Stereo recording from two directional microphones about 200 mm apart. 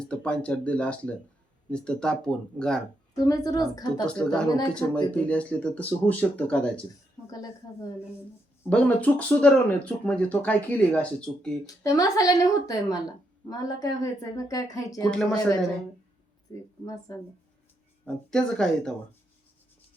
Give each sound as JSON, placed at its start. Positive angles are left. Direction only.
{"t": 0.0, "sound": "speech", "side_deg": 5}
{"t": 3.2, "sound": "a woman's voice", "side_deg": 20}
{"t": 4.0, "sound": "speech", "side_deg": 5}
{"t": 4.4, "sound": "a woman's voice", "side_deg": 20}
{"t": 5.1, "sound": "speech", "side_deg": 5}
{"t": 7.3, "sound": "speech", "side_deg": 15}
{"t": 11.6, "sound": "speech", "side_deg": 15}
{"t": 15.1, "sound": "speech", "side_deg": 0}
{"t": 16.5, "sound": "speech", "side_deg": 15}
{"t": 18.0, "sound": "speech", "side_deg": 5}